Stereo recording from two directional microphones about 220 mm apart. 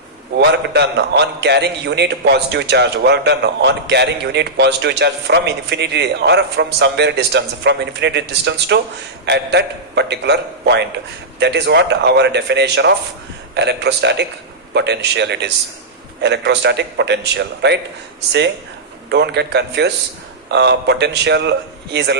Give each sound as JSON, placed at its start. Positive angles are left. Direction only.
{"t": 0.3, "sound": "a man's voice", "side_deg": -50}